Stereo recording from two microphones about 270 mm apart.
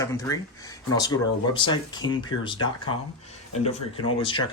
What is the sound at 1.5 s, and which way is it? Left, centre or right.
Speech, centre.